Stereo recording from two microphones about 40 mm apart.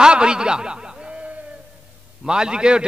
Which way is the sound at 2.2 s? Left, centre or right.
Centre.